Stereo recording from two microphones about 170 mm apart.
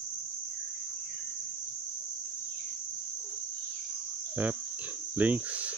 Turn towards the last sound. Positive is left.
turn(degrees=-10)  # may be behind; listen again after turning